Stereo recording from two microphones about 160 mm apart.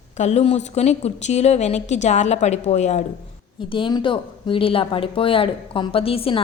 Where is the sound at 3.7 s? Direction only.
30° left (ahead or behind).